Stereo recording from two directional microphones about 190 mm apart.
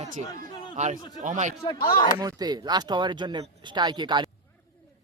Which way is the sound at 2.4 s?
20° right (ahead or behind).